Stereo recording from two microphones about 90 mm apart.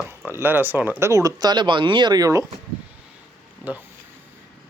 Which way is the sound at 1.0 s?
35° right (ahead or behind).